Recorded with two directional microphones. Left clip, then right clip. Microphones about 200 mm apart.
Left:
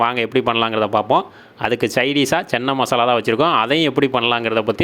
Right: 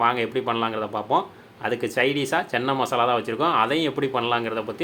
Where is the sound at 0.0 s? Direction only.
40° left (ahead or behind).